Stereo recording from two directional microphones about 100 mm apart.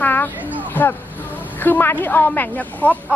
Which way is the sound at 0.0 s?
20° left (ahead or behind).